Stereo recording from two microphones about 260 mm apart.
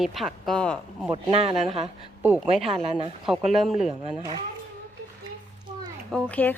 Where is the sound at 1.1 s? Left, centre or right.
Right.